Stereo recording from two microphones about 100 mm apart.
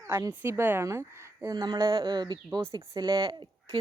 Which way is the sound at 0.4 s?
25° right (ahead or behind).